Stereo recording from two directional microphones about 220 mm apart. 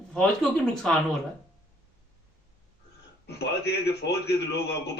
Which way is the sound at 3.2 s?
50° left (ahead or behind).